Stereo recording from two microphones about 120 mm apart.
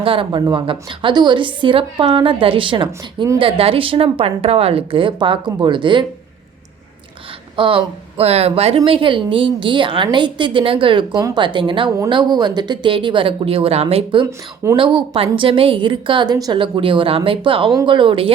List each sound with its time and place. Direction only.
0.0 s speech: 50° right (ahead or behind)
7.5 s speech: 45° right (ahead or behind)
14.3 s speech: 25° right (ahead or behind)
14.8 s speech: 50° right (ahead or behind)